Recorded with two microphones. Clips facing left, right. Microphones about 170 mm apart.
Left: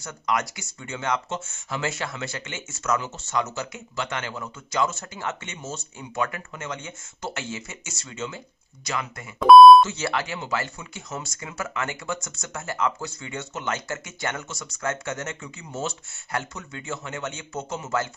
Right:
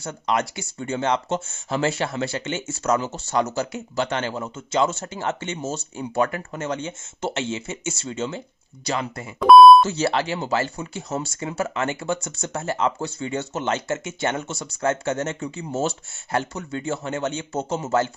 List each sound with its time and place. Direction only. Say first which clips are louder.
0.0 s speech: right 3 dB; 30° right (ahead or behind)
9.4 s beep: even; centre (ahead or behind)
9.8 s speech: right 5 dB; 30° right (ahead or behind)